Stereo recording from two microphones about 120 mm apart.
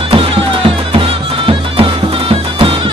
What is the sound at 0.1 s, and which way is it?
Music, 50° right (ahead or behind).